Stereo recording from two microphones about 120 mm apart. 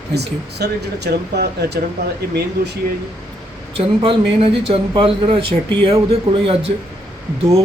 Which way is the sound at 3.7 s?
50° right (ahead or behind).